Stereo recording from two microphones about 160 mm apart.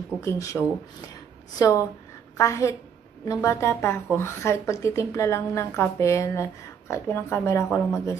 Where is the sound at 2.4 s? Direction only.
20° left (ahead or behind).